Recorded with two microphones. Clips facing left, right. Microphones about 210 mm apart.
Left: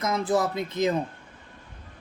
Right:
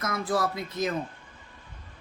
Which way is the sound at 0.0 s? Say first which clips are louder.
Left 3 dB; 20° left (ahead or behind).